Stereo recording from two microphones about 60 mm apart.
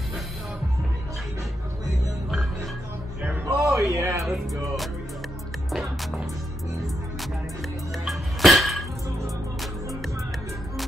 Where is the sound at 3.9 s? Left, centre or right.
Right.